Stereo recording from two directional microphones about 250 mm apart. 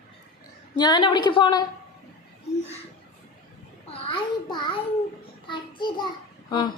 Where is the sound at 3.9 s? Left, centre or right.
Left.